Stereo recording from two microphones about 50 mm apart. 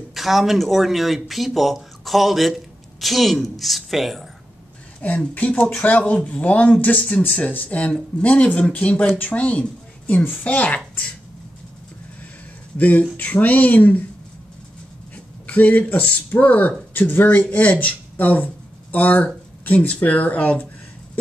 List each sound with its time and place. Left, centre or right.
0.1 s speech: centre
5.3 s speech: left
12.7 s speech: left
15.4 s speech: left